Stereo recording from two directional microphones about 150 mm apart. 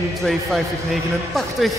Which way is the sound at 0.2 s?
Centre (ahead or behind).